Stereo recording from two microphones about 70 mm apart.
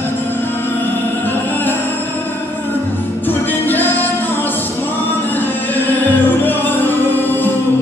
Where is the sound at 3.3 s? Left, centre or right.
Left.